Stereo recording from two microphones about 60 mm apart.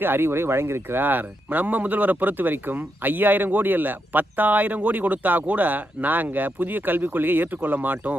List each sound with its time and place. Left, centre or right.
0.0 s speech: right